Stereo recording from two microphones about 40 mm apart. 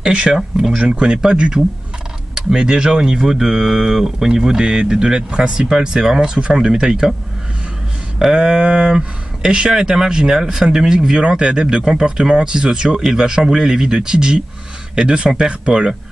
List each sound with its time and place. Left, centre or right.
0.0 s speech: right
0.4 s speech: centre
0.7 s speech: right
8.4 s speech: right
11.2 s speech: right